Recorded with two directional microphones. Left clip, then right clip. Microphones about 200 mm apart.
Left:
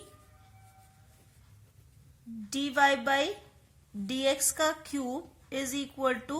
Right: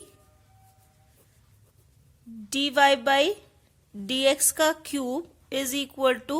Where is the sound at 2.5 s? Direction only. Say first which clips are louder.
Right 5 dB; 50° right (ahead or behind).